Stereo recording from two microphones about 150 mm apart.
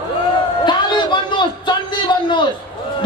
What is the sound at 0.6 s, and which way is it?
A man's voice, 30° left (ahead or behind).